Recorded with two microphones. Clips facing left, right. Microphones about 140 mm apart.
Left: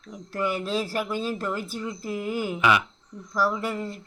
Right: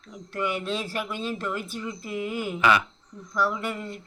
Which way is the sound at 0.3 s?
35° left (ahead or behind).